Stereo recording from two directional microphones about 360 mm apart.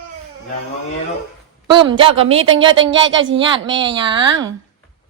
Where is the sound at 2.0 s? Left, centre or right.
Centre.